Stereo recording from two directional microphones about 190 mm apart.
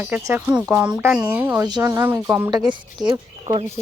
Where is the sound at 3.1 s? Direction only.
25° right (ahead or behind).